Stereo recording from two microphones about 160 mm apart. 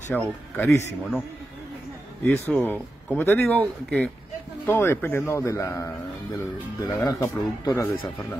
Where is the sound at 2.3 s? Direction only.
10° left (ahead or behind).